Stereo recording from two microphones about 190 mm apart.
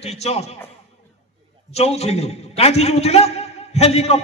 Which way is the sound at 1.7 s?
35° left (ahead or behind).